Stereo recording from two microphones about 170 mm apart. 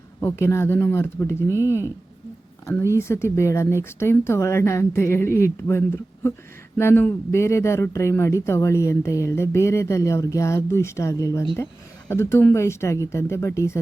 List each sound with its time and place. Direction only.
0.2 s speech: 15° left (ahead or behind)
2.6 s speech: 15° left (ahead or behind)